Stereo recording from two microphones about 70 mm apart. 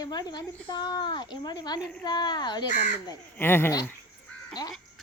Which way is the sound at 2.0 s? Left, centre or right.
Left.